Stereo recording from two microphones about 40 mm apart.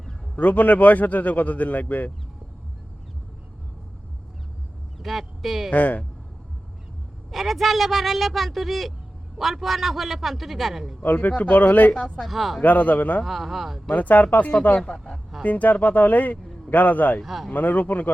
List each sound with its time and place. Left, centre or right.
0.3 s a man's voice: left
4.9 s speech: centre
5.7 s a man's voice: left
7.3 s speech: centre
11.0 s speech: left
11.3 s a man's voice: left
12.2 s speech: centre
12.6 s speech: left
13.2 s speech: centre
13.9 s speech: left
17.2 s speech: centre
17.5 s speech: left